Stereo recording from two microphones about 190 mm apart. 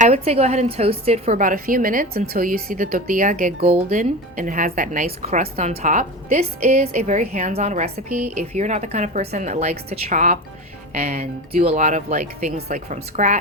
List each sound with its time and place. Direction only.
0.0 s a woman's voice: 35° right (ahead or behind)